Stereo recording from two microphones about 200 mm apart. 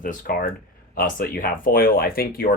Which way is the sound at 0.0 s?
45° left (ahead or behind).